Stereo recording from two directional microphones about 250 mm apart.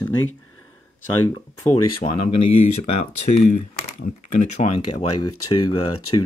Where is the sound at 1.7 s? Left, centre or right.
Left.